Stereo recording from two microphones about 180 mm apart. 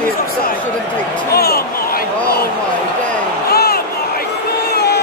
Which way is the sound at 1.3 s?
60° left (ahead or behind).